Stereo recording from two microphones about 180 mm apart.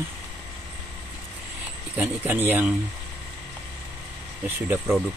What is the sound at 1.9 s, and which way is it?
Speech, 10° right (ahead or behind).